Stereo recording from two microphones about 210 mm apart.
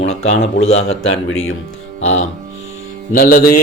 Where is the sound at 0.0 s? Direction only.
70° left (ahead or behind).